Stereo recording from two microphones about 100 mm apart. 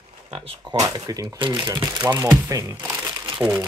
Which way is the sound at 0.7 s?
40° right (ahead or behind).